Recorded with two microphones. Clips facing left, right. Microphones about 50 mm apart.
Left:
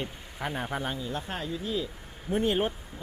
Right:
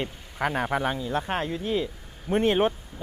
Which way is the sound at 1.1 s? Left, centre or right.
Right.